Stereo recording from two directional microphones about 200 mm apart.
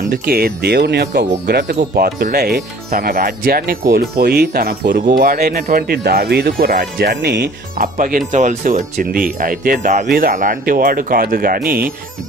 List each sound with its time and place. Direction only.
0.1 s speech: 50° right (ahead or behind)
1.8 s speech: 45° right (ahead or behind)